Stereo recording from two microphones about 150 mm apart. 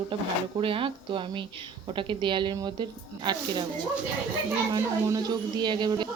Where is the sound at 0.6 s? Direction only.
35° right (ahead or behind).